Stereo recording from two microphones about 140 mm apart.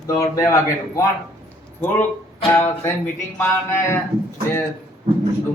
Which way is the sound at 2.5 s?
15° left (ahead or behind).